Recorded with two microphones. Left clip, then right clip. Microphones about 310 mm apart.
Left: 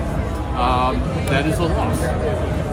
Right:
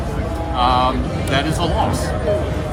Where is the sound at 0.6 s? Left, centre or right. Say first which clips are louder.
Right 3 dB; right.